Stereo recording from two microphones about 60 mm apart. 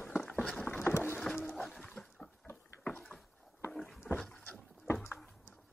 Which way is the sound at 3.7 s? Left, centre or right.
Centre.